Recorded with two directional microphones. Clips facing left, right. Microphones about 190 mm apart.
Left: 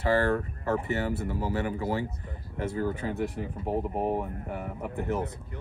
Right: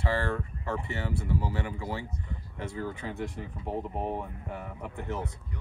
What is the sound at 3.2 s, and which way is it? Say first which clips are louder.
Speech: left 5 dB; 10° left (ahead or behind).